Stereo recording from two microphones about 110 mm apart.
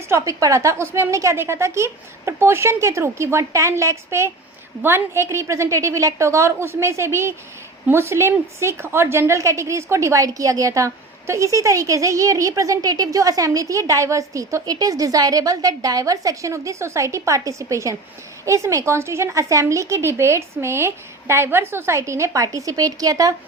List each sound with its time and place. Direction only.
0.1 s a woman's voice: 30° right (ahead or behind)